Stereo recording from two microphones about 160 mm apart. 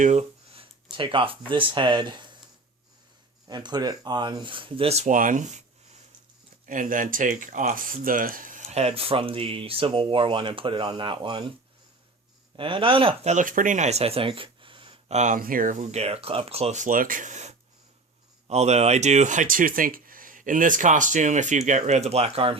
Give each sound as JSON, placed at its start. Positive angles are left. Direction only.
{"t": 0.0, "sound": "speech", "side_deg": -45}
{"t": 3.4, "sound": "speech", "side_deg": -25}
{"t": 12.5, "sound": "speech", "side_deg": -35}
{"t": 13.3, "sound": "speech", "side_deg": -55}
{"t": 15.2, "sound": "speech", "side_deg": -55}